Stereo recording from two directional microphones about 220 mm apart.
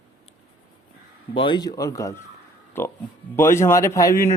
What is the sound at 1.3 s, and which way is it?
Speech, 20° left (ahead or behind).